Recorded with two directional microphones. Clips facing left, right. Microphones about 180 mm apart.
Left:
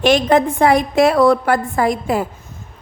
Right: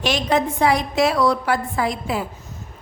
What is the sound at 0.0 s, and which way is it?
A woman's voice, 50° left (ahead or behind).